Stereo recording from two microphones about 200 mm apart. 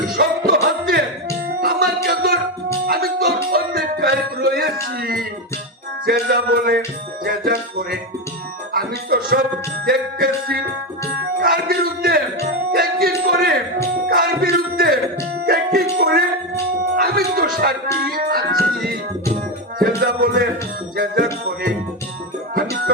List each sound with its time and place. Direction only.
0.2 s music: 50° right (ahead or behind)
6.1 s a sound: 45° right (ahead or behind)
7.3 s music: 45° right (ahead or behind)
8.7 s speech: 45° right (ahead or behind)
9.8 s music: 45° right (ahead or behind)
14.5 s a sound: 50° right (ahead or behind)
15.4 s music: 45° right (ahead or behind)
20.0 s a sound: 45° right (ahead or behind)
20.9 s music: 45° right (ahead or behind)